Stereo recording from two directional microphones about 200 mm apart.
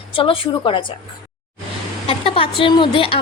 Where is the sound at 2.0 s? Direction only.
30° left (ahead or behind).